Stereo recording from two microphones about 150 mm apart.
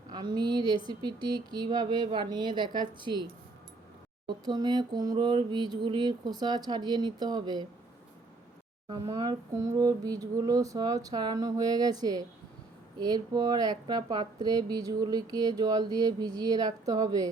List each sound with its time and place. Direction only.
0.1 s a woman's voice: 30° right (ahead or behind)
4.3 s speech: 25° right (ahead or behind)
9.0 s speech: 25° right (ahead or behind)